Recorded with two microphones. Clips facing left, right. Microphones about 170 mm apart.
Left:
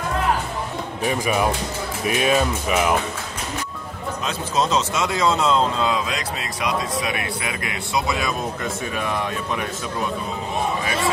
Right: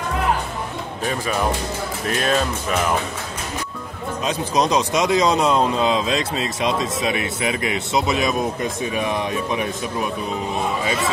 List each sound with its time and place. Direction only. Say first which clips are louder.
1.0 s speech: left 1 dB; 15° left (ahead or behind)
4.2 s speech: right 3 dB; 15° right (ahead or behind)